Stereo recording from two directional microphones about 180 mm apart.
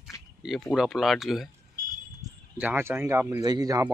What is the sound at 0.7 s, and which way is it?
Speech, centre (ahead or behind).